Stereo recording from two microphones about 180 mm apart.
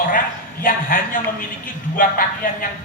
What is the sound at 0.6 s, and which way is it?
A man's voice, 50° left (ahead or behind).